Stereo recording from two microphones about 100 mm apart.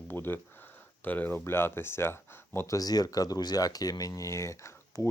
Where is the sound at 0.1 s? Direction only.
20° left (ahead or behind).